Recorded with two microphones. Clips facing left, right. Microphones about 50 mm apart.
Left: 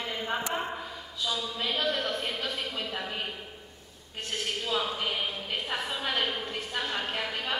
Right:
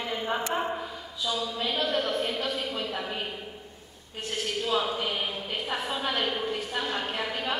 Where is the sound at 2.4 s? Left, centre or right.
Centre.